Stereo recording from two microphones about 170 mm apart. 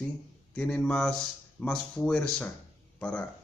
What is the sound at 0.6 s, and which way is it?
A man's voice, 5° left (ahead or behind).